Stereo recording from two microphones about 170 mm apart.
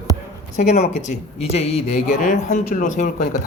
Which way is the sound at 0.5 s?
45° left (ahead or behind).